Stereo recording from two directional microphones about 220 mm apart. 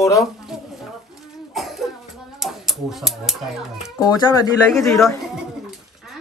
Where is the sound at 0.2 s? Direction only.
Centre (ahead or behind).